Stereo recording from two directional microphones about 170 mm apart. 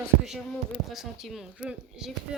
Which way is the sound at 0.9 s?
Centre (ahead or behind).